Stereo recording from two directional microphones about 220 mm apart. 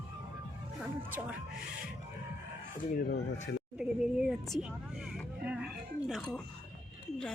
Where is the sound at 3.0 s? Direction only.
45° left (ahead or behind).